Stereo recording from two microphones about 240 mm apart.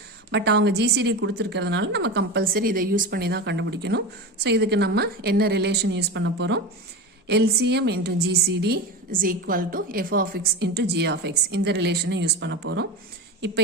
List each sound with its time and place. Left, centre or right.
0.3 s a woman's voice: right